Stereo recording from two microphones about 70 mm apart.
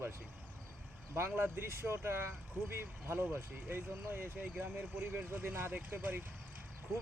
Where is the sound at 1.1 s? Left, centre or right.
Right.